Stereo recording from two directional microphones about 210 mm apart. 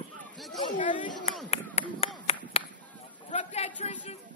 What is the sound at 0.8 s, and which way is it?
Speech, 25° left (ahead or behind).